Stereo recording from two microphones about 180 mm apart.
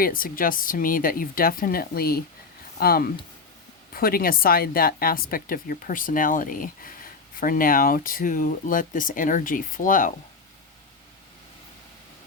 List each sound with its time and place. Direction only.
0.0 s a woman's voice: 50° left (ahead or behind)